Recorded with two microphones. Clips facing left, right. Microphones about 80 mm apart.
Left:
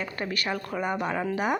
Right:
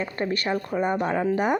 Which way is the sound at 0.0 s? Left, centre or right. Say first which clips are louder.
Right 4 dB; right.